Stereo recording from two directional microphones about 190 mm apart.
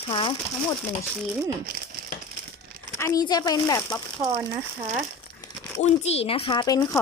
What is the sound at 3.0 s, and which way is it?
A woman's voice, 20° left (ahead or behind).